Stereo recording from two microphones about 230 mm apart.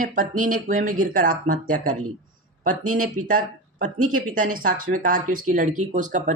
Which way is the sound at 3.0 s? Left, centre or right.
Right.